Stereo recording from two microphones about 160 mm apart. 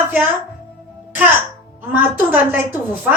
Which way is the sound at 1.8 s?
10° right (ahead or behind).